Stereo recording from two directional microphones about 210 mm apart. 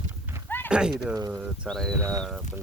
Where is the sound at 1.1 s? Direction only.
15° right (ahead or behind).